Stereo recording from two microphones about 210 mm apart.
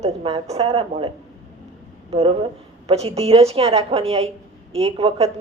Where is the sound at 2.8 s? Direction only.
30° right (ahead or behind).